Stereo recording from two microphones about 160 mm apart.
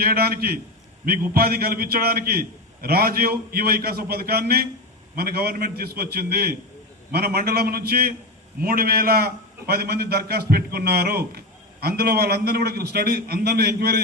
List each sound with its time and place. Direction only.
0.0 s a man's voice: 70° right (ahead or behind)